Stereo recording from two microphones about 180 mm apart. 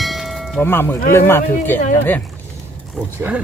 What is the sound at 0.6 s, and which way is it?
Speech, 10° left (ahead or behind).